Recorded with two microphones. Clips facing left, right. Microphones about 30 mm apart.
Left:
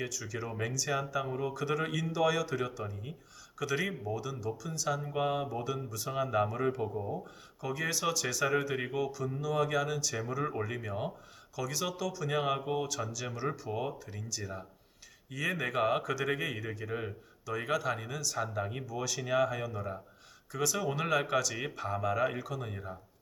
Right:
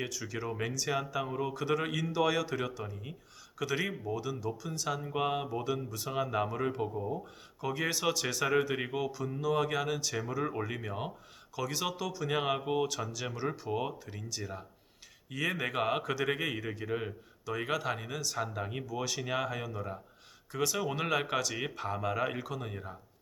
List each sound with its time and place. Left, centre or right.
0.0 s speech: centre